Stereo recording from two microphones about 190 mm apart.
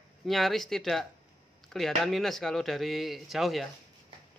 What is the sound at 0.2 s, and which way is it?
Speech, centre (ahead or behind).